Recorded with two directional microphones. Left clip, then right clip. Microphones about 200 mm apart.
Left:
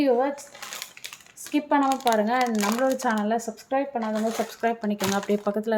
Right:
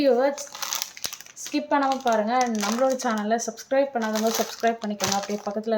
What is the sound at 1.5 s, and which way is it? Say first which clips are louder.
Speech: even; 15° left (ahead or behind).